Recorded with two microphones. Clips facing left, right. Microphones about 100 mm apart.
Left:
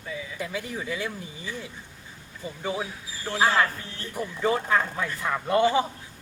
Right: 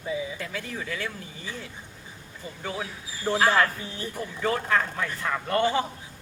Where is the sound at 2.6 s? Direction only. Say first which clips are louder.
Left 3 dB; 15° left (ahead or behind).